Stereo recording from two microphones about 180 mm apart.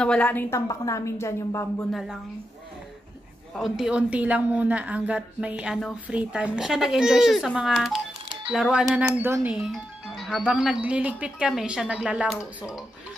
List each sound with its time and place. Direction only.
0.0 s a woman's voice: 5° left (ahead or behind)
1.9 s speech: centre (ahead or behind)
3.5 s speech: centre (ahead or behind)